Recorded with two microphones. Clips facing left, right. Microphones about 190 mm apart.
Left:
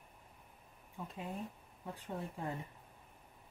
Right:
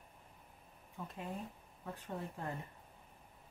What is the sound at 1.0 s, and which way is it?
Speech, 15° left (ahead or behind).